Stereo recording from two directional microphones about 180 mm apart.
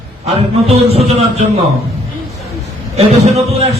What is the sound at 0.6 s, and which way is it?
A man's voice, 35° right (ahead or behind).